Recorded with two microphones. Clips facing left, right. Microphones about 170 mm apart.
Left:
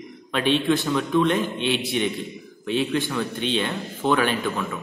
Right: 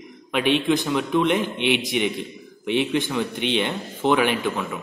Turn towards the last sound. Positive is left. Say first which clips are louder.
# right 1 dB
turn(degrees=-15)  # may be behind; listen again after turning